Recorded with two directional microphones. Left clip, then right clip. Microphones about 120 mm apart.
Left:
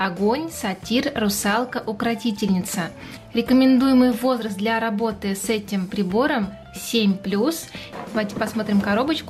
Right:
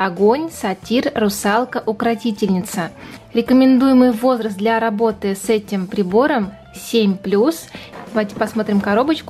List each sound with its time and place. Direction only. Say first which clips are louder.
0.2 s speech: right 7 dB; 20° right (ahead or behind)